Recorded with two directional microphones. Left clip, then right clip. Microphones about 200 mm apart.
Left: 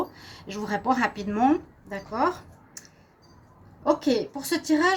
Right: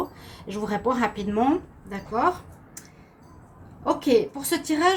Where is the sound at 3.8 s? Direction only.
45° left (ahead or behind).